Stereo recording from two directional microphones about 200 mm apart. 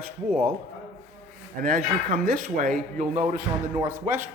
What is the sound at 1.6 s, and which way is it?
A man's voice, 45° right (ahead or behind).